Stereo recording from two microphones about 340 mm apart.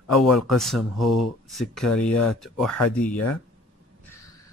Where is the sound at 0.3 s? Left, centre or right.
Left.